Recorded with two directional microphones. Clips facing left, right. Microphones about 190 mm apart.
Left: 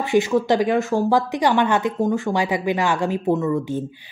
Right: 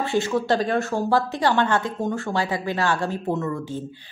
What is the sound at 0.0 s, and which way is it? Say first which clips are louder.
Speech: left 4 dB; 15° left (ahead or behind).